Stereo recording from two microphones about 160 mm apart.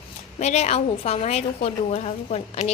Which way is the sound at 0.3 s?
45° left (ahead or behind).